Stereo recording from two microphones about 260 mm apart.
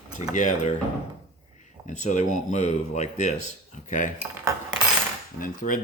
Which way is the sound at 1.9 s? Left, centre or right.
Left.